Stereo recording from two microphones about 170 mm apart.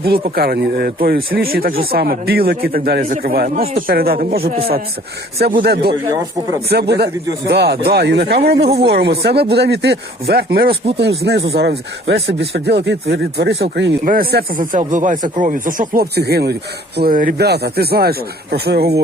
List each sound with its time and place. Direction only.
0.0 s speech: 65° right (ahead or behind)
10.9 s speech: 85° right
14.0 s speech: 60° right (ahead or behind)
17.0 s speech: 55° right (ahead or behind)